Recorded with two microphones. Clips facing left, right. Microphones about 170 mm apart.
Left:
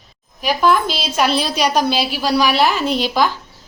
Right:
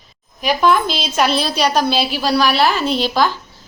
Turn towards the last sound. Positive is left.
turn(degrees=10)  # may be behind; listen again after turning